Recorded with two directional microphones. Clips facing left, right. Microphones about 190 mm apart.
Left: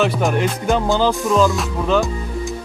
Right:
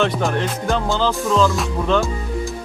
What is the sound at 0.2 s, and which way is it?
Music, 15° left (ahead or behind).